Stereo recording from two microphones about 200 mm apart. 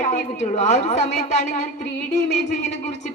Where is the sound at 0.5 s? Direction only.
35° left (ahead or behind).